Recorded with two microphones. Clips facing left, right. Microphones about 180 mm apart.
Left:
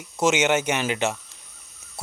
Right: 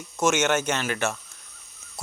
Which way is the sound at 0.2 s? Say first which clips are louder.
Left 2 dB; 15° left (ahead or behind).